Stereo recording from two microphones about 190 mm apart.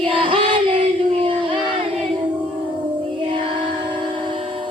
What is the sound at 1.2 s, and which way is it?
Child singing, 25° right (ahead or behind).